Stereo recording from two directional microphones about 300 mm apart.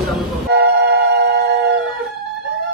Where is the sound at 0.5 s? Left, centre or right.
Right.